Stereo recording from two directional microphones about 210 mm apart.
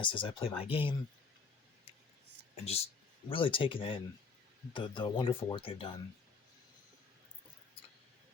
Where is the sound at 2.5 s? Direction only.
30° left (ahead or behind).